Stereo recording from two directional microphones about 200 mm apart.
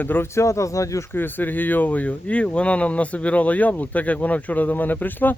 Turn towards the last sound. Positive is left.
turn(degrees=10)  # may be behind; listen again after turning